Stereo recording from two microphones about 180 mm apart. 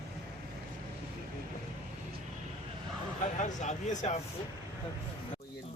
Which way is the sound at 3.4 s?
45° left (ahead or behind).